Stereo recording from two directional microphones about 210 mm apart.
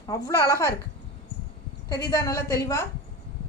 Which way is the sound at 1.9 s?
15° left (ahead or behind).